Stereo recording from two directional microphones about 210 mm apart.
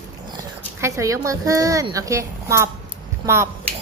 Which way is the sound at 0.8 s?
15° right (ahead or behind).